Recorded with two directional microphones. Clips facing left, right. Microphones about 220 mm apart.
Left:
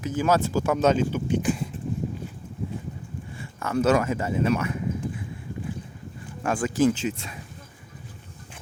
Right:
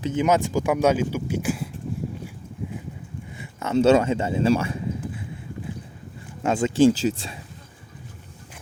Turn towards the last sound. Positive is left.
turn(degrees=-30)  # may be behind; listen again after turning